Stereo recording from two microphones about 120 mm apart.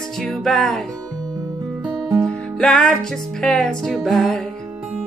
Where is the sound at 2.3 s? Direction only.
10° left (ahead or behind).